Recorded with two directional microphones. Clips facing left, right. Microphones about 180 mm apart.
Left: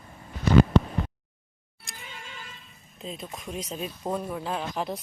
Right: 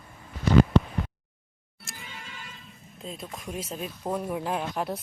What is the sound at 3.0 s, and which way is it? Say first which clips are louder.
Speech: left 1 dB; centre (ahead or behind).